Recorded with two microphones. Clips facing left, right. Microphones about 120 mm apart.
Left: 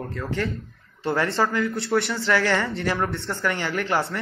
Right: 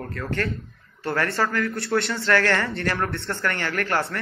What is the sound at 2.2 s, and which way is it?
Speech, 15° left (ahead or behind).